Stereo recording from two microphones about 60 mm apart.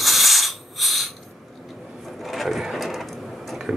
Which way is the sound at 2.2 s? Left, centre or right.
Centre.